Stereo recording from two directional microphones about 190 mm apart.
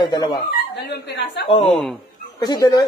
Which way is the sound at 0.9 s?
60° left (ahead or behind).